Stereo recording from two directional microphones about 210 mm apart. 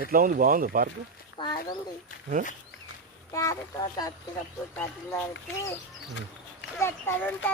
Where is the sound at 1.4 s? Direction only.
20° left (ahead or behind).